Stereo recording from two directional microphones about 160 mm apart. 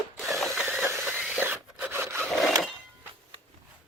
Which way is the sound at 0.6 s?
15° right (ahead or behind).